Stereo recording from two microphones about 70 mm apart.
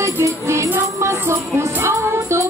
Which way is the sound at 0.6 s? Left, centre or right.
Right.